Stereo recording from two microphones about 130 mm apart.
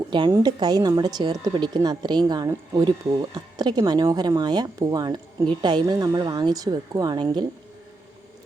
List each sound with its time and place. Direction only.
0.3 s speech: 30° right (ahead or behind)